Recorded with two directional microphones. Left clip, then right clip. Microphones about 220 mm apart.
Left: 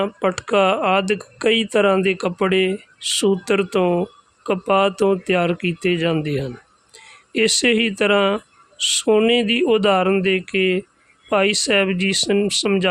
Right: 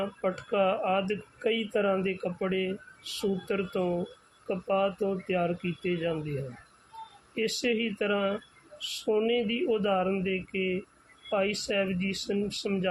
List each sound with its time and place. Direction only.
0.0 s speech: 45° left (ahead or behind)
7.3 s speech: 45° left (ahead or behind)